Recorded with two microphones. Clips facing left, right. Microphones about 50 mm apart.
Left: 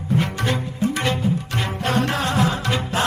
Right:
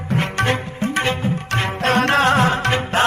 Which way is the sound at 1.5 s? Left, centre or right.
Right.